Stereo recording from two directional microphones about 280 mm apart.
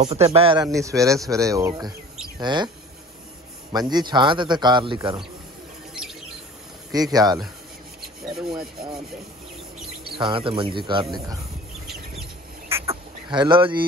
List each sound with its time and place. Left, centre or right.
0.0 s speech: right
3.7 s speech: centre
6.9 s speech: centre
8.4 s rub: centre
10.1 s speech: centre
11.9 s chicken: centre